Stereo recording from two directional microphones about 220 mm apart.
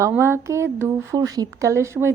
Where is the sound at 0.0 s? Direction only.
10° right (ahead or behind).